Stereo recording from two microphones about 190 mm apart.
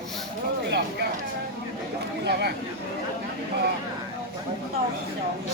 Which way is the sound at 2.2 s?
60° right (ahead or behind).